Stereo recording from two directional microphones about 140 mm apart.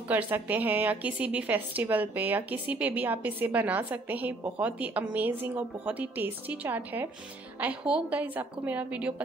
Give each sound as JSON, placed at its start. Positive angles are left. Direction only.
{"t": 0.1, "sound": "a woman's voice", "side_deg": -10}